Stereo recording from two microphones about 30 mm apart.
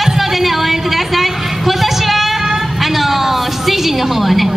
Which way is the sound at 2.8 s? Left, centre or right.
Centre.